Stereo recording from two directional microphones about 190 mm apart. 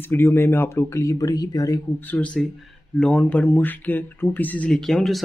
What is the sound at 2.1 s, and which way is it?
Speech, 5° left (ahead or behind).